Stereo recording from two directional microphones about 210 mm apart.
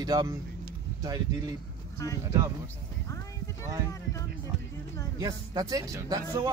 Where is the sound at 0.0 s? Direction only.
20° right (ahead or behind).